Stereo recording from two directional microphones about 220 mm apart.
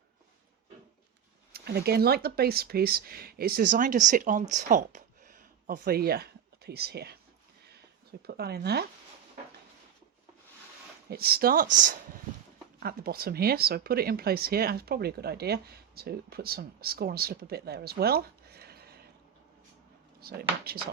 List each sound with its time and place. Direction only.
1.5 s speech: 45° right (ahead or behind)
8.3 s speech: 45° right (ahead or behind)
11.1 s speech: 45° right (ahead or behind)
20.2 s speech: 45° right (ahead or behind)